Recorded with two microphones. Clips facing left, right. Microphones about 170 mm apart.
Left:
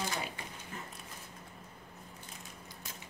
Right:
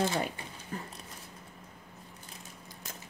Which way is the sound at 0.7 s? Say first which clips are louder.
Right 7 dB; 35° right (ahead or behind).